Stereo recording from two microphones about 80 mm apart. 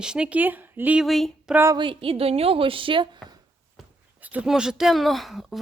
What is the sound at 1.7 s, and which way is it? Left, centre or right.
Speech, right.